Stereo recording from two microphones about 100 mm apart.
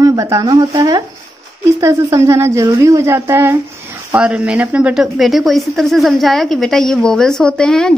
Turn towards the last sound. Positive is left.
turn(degrees=5)  # may be behind; listen again after turning